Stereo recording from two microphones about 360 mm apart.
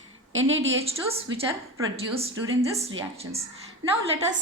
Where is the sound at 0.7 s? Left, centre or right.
Centre.